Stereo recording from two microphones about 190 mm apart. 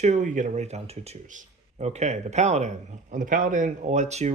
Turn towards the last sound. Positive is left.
turn(degrees=-35)  # may be behind; listen again after turning